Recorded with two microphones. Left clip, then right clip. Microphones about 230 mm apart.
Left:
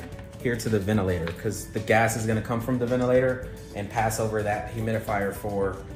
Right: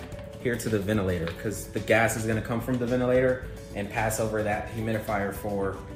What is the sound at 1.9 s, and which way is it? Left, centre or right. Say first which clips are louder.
Speech: left 1 dB; centre.